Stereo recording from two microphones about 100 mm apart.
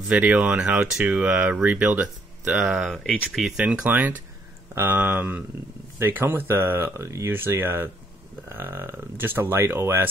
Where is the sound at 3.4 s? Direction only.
10° right (ahead or behind).